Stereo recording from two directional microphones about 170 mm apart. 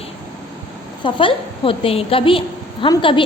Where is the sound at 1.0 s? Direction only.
30° left (ahead or behind).